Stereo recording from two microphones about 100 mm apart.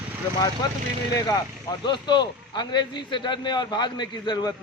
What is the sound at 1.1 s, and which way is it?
A man's voice, 40° left (ahead or behind).